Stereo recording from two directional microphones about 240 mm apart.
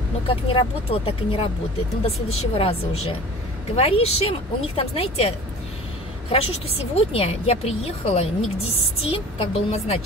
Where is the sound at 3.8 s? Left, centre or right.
Left.